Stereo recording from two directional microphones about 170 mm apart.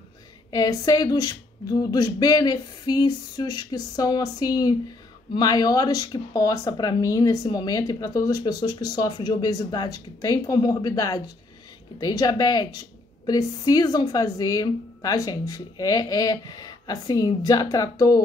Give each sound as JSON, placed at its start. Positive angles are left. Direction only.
{"t": 0.5, "sound": "a woman's voice", "side_deg": 20}